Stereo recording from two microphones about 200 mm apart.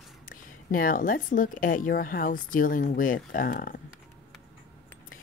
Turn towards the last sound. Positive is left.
turn(degrees=45)  # may be behind; listen again after turning